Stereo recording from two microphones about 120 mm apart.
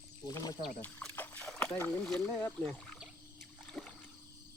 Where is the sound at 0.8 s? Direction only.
10° left (ahead or behind).